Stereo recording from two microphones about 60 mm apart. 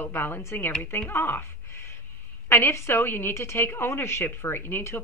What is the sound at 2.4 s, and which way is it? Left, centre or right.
A woman's voice, left.